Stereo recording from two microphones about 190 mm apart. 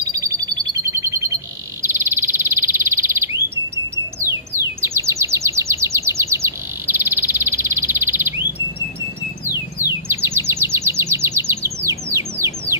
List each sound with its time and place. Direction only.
0.1 s a sound: 15° right (ahead or behind)
4.8 s chirp: 15° right (ahead or behind)
9.7 s chirp: 15° right (ahead or behind)
12.1 s bird: 15° right (ahead or behind)